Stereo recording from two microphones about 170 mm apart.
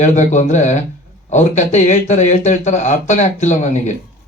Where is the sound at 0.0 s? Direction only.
45° left (ahead or behind).